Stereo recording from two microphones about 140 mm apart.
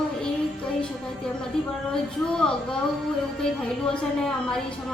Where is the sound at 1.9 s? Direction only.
5° left (ahead or behind).